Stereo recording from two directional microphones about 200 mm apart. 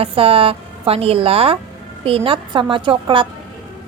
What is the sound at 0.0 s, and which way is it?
A woman's voice, 30° right (ahead or behind).